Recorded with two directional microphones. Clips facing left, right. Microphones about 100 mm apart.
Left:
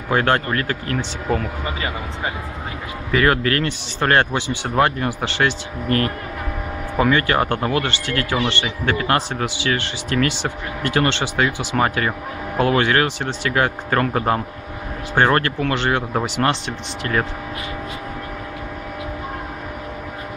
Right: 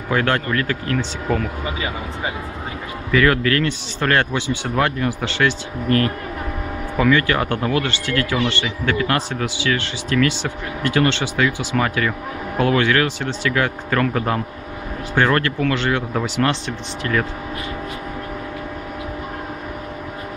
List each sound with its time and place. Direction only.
0.1 s speech: 30° left (ahead or behind)
3.1 s speech: 30° left (ahead or behind)